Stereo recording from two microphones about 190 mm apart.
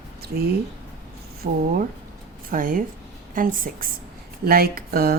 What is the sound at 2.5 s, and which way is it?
Speech, 45° right (ahead or behind).